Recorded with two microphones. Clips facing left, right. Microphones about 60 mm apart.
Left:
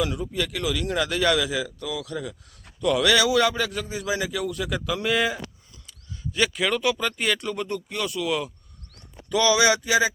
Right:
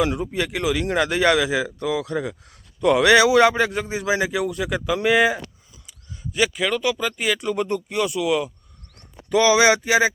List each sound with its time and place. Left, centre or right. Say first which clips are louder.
0.0 s a man's voice: right 4 dB; right; by 8.5 s centre
9.3 s speech: right 4 dB; right